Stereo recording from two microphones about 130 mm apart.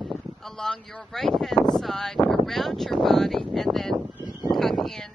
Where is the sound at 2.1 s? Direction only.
40° left (ahead or behind).